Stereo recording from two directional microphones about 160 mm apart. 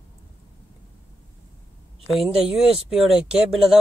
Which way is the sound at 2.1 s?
Centre (ahead or behind).